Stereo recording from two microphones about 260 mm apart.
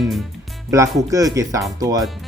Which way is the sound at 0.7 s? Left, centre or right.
Centre.